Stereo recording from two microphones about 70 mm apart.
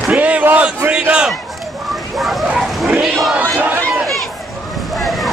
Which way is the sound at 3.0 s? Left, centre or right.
Centre.